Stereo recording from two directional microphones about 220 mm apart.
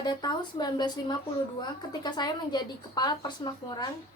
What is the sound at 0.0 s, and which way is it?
Speech, 20° left (ahead or behind).